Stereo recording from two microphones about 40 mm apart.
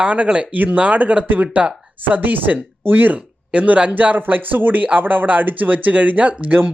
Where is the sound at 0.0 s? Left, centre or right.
Right.